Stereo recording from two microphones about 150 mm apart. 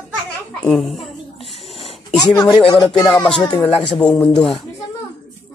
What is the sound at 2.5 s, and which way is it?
Speech, 35° left (ahead or behind).